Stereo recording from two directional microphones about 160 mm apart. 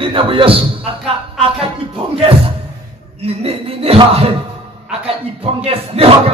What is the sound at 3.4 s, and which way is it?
Speech, 35° right (ahead or behind).